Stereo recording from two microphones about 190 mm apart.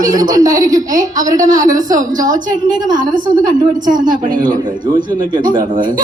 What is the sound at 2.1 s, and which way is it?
Speech, 20° right (ahead or behind).